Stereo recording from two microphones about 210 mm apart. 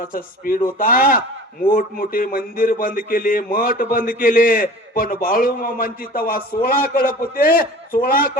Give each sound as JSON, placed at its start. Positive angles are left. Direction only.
{"t": 0.0, "sound": "a man's voice", "side_deg": 45}